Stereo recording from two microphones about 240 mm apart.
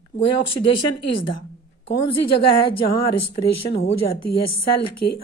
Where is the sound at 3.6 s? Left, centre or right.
Left.